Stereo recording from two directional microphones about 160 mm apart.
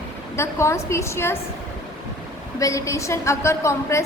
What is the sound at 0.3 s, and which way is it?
A woman's voice, 15° left (ahead or behind).